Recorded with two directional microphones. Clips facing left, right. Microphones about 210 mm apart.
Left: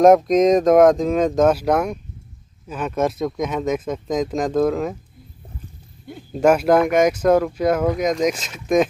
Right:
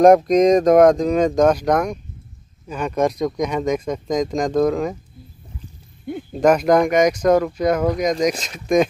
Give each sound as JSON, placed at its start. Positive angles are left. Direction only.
{"t": 0.0, "sound": "speech", "side_deg": 0}
{"t": 6.1, "sound": "speech", "side_deg": -55}
{"t": 6.4, "sound": "speech", "side_deg": 5}